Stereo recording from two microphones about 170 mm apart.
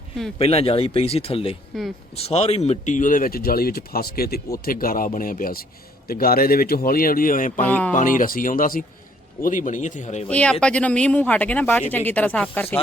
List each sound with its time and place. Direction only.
0.3 s speech: 35° left (ahead or behind)
1.7 s speech: centre (ahead or behind)
2.1 s speech: 35° left (ahead or behind)
7.6 s speech: 10° left (ahead or behind)
7.9 s speech: 50° left (ahead or behind)
10.2 s speech: 5° left (ahead or behind)